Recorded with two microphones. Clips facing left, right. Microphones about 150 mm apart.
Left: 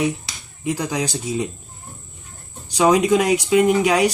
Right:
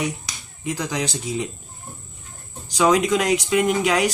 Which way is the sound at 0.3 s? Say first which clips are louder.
Left 4 dB; 10° left (ahead or behind).